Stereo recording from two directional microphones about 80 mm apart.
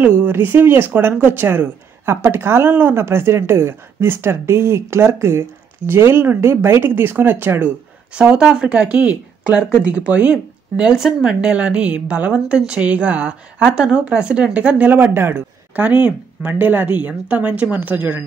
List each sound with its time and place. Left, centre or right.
0.0 s speech: right
8.1 s speech: centre